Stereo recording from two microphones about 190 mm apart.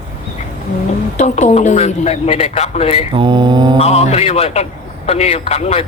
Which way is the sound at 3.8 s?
35° left (ahead or behind).